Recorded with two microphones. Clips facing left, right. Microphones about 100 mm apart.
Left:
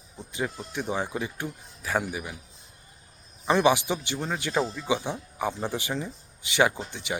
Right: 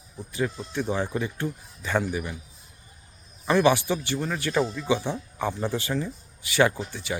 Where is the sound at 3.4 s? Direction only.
15° left (ahead or behind).